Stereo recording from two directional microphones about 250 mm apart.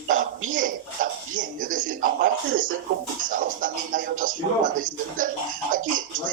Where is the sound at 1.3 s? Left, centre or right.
Right.